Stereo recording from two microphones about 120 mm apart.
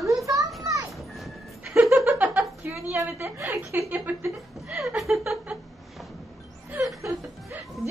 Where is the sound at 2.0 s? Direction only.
10° right (ahead or behind).